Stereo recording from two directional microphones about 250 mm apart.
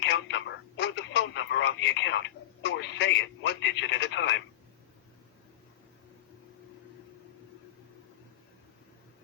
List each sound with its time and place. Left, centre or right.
0.0 s radio: left
2.6 s telephone: left